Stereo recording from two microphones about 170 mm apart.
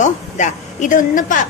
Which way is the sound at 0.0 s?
45° left (ahead or behind).